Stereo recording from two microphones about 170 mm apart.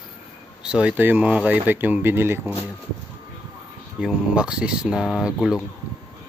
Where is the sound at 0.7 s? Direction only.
5° right (ahead or behind).